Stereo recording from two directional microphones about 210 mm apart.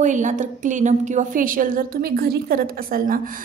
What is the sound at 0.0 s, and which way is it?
A woman's voice, 35° right (ahead or behind).